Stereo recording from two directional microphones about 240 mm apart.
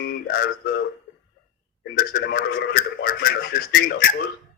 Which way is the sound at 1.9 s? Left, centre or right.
Left.